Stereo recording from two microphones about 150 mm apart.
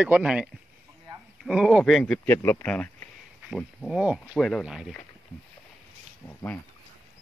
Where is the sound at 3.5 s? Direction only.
5° right (ahead or behind).